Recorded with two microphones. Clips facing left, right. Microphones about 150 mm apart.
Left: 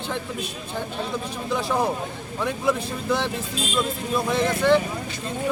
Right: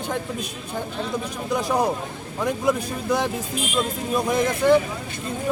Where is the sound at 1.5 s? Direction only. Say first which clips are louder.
Right 2 dB; 15° right (ahead or behind).